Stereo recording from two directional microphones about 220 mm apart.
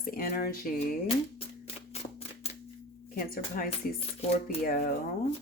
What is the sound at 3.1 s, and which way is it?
Speech, 40° left (ahead or behind).